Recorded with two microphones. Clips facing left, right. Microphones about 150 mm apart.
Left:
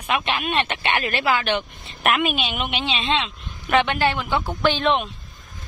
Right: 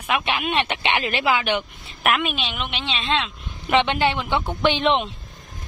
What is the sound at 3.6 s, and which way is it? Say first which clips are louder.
A woman's voice: even; 20° right (ahead or behind).